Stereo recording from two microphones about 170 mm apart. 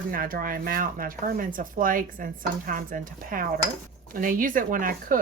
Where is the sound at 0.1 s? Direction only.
55° right (ahead or behind).